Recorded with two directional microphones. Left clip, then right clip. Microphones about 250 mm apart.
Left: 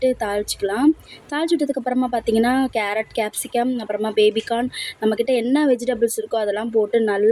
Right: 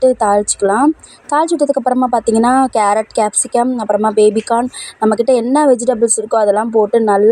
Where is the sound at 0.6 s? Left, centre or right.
Right.